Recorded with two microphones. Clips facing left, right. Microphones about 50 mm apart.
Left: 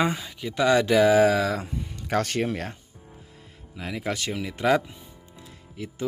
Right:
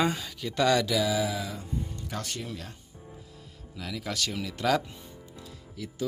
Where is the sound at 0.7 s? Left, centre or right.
Left.